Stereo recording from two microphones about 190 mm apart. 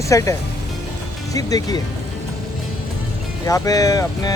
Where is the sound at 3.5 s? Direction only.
20° left (ahead or behind).